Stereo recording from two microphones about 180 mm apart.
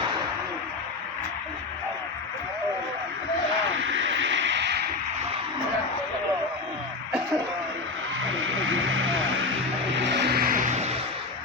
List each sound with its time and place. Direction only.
3.9 s a sound: 90° right
8.4 s vehicle: 90° right
10.0 s vehicle: 75° right (ahead or behind); by 10.9 s 45° right (ahead or behind)